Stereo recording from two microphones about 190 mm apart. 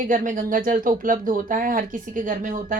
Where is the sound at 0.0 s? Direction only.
45° right (ahead or behind).